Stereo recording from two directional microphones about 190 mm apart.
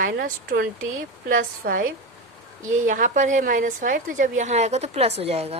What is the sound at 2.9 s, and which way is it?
A woman's voice, 45° right (ahead or behind).